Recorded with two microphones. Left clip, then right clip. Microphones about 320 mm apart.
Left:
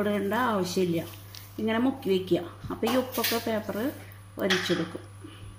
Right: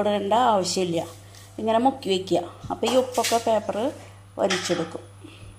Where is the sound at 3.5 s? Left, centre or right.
Right.